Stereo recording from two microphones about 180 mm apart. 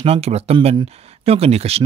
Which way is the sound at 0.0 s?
35° right (ahead or behind).